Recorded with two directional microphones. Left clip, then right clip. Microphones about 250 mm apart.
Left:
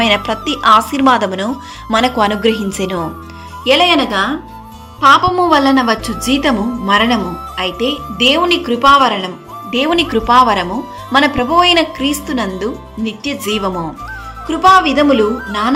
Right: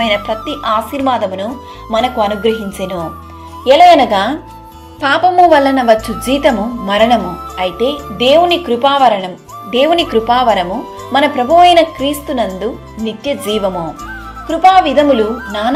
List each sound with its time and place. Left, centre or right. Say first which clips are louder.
0.0 s a woman's voice: left 1 dB; centre
3.6 s speech: right 5 dB; centre
4.9 s speech: even; centre